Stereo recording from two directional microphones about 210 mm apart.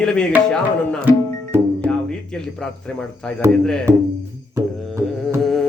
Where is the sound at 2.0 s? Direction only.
5° left (ahead or behind).